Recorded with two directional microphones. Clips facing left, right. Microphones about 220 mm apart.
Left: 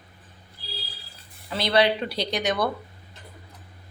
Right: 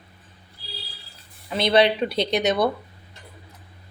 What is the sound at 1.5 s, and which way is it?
A woman's voice, 20° right (ahead or behind).